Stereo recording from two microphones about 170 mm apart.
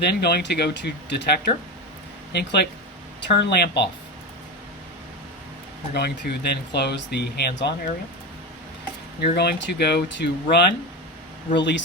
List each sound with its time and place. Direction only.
0.0 s speech: 70° left (ahead or behind)
5.9 s speech: 75° left (ahead or behind)
9.2 s speech: 75° left (ahead or behind)
11.5 s speech: 90° left